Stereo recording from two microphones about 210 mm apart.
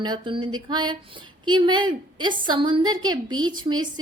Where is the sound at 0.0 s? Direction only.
20° right (ahead or behind).